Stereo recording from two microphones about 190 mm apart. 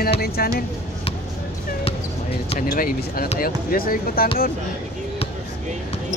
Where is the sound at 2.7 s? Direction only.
50° left (ahead or behind).